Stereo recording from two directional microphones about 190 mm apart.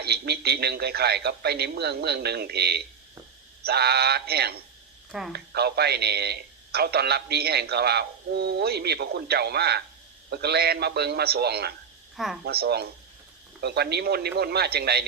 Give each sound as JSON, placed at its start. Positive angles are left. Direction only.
{"t": 0.0, "sound": "a man's voice", "side_deg": -55}
{"t": 12.1, "sound": "speech", "side_deg": 0}
{"t": 12.5, "sound": "a man's voice", "side_deg": -55}